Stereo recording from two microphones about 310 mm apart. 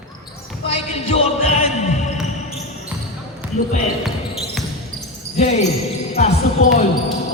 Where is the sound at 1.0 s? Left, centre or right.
Left.